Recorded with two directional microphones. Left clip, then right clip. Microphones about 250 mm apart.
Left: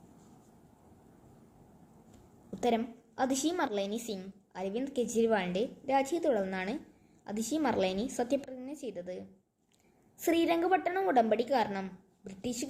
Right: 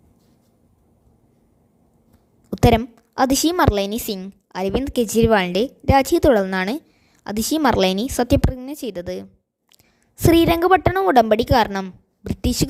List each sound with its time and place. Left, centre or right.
2.6 s a woman's voice: right